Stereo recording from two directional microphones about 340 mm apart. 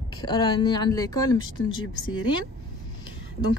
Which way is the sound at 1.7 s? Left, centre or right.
Left.